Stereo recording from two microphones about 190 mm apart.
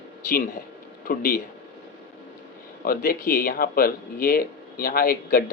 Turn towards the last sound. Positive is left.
turn(degrees=50)  # may be behind; listen again after turning